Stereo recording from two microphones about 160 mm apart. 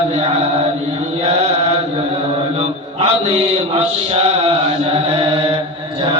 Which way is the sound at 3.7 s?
40° right (ahead or behind).